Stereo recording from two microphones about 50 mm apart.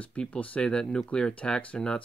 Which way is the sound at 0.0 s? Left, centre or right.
Left.